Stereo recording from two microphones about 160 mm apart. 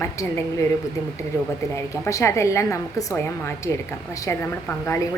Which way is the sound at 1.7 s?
20° left (ahead or behind).